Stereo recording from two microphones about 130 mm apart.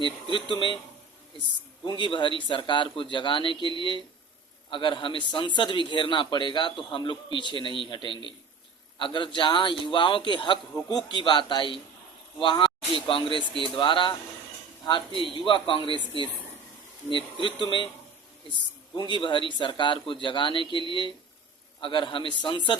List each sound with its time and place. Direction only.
0.3 s a man's voice: 35° left (ahead or behind)
1.8 s a man's voice: 35° left (ahead or behind)
4.7 s a man's voice: 40° left (ahead or behind)
15.2 s a man's voice: 40° left (ahead or behind)
15.9 s a woman's voice: 35° right (ahead or behind)
17.3 s a man's voice: 40° left (ahead or behind)
18.9 s a man's voice: 35° left (ahead or behind)